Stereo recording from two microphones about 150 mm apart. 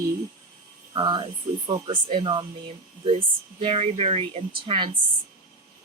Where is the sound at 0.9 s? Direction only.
30° right (ahead or behind).